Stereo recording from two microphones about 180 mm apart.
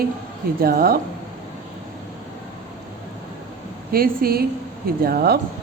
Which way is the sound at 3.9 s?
55° right (ahead or behind).